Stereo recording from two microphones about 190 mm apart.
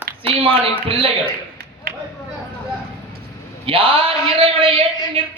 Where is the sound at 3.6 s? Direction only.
30° right (ahead or behind).